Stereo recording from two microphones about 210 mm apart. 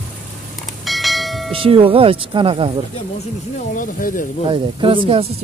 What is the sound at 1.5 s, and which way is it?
Speech, 25° right (ahead or behind).